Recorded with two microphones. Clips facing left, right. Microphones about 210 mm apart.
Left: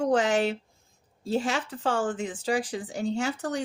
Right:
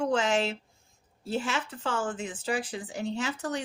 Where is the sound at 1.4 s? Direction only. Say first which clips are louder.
Left 1 dB; 30° left (ahead or behind).